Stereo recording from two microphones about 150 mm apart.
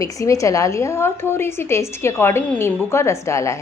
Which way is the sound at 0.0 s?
20° left (ahead or behind).